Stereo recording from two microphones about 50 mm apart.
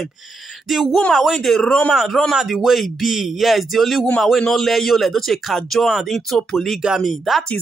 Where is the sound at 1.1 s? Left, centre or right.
Centre.